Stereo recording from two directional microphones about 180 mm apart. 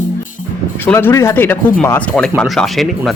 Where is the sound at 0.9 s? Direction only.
15° left (ahead or behind).